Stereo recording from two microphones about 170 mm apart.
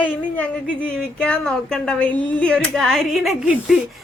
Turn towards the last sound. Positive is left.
turn(degrees=-5)  # may be behind; listen again after turning